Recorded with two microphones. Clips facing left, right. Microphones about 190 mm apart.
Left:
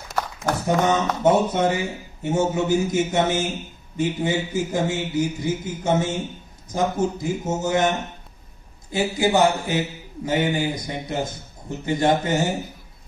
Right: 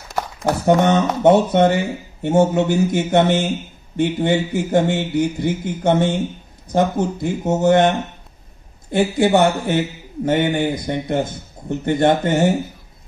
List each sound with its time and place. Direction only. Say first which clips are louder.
0.7 s a man's voice: right 6 dB; 65° right (ahead or behind)
8.9 s a man's voice: right 5 dB; 60° right (ahead or behind)